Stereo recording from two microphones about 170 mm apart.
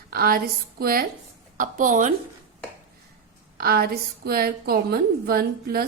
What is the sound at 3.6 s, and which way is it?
A woman's voice, 60° right (ahead or behind).